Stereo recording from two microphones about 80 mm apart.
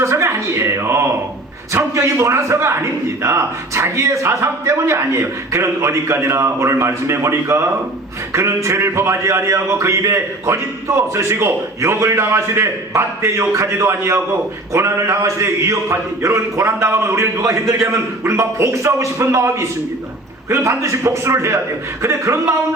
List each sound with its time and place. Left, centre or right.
0.0 s speech: right